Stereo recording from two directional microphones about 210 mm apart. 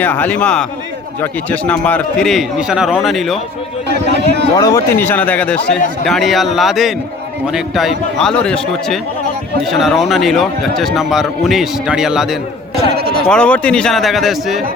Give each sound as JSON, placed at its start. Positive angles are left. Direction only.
{"t": 0.0, "sound": "a man's voice", "side_deg": 10}
{"t": 3.8, "sound": "speech", "side_deg": -55}
{"t": 4.5, "sound": "a man's voice", "side_deg": 15}
{"t": 13.0, "sound": "a sound", "side_deg": -50}
{"t": 13.2, "sound": "a man's voice", "side_deg": 5}